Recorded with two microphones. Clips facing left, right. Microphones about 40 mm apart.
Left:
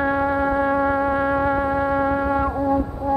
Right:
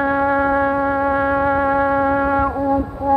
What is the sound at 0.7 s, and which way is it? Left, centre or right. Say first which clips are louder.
Music: right 2 dB; centre.